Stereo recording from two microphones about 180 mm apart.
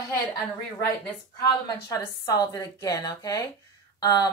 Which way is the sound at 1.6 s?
20° left (ahead or behind).